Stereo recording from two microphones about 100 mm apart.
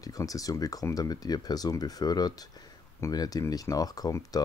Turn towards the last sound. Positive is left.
turn(degrees=40)  # may be behind; listen again after turning